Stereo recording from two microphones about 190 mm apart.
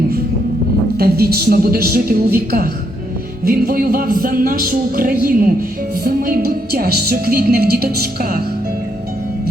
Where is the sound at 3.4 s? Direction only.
50° right (ahead or behind).